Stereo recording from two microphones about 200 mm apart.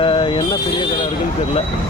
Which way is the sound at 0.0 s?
25° left (ahead or behind).